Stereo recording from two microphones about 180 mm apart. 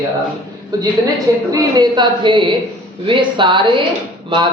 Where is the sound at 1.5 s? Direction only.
20° right (ahead or behind).